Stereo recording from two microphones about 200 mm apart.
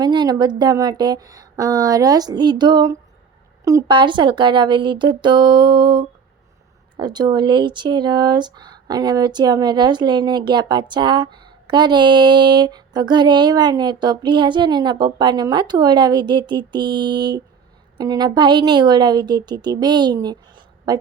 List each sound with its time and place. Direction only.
0.0 s speech: 20° right (ahead or behind)